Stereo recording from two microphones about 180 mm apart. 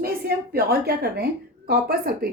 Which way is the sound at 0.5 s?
60° right (ahead or behind).